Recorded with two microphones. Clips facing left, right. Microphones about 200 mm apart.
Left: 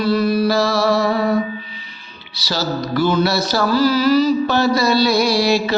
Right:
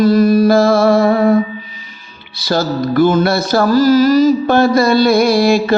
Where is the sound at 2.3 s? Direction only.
50° right (ahead or behind).